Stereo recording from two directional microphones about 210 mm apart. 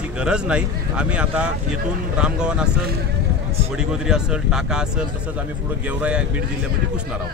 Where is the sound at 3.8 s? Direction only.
5° right (ahead or behind).